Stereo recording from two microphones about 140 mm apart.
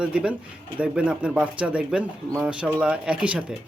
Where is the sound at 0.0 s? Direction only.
10° right (ahead or behind).